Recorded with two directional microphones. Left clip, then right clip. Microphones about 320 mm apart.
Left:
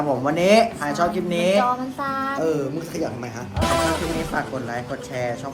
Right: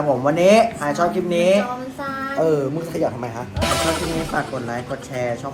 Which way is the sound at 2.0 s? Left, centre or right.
Centre.